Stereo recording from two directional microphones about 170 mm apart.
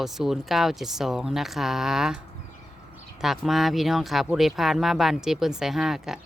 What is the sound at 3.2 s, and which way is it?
Speech, centre (ahead or behind).